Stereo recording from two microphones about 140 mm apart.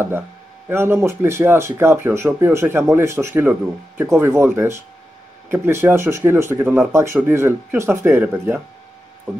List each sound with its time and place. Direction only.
0.7 s speech: 15° right (ahead or behind)